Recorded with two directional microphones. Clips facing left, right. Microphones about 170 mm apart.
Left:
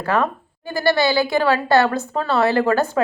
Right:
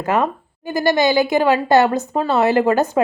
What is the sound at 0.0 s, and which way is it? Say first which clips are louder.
A woman's voice: right 2 dB; 20° right (ahead or behind).